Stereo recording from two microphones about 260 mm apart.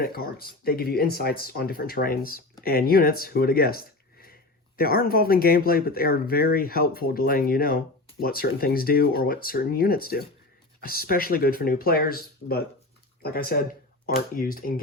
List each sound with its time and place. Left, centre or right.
0.0 s speech: left